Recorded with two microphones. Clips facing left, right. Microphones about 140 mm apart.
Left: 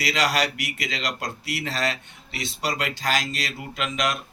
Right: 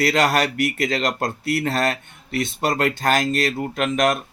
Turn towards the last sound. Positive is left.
turn(degrees=-50)  # may be behind; listen again after turning